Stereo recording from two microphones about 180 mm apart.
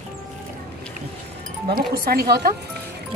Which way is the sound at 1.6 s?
55° right (ahead or behind).